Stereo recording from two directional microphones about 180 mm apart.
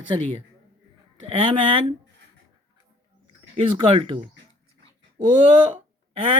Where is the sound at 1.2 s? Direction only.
30° right (ahead or behind).